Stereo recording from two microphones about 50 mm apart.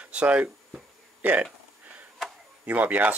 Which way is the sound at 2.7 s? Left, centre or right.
Right.